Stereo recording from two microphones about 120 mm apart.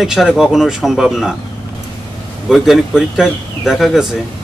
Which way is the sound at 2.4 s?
Centre (ahead or behind).